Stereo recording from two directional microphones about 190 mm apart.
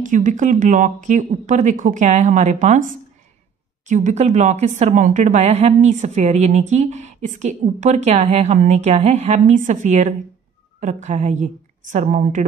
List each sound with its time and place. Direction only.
0.0 s a woman's voice: 40° right (ahead or behind)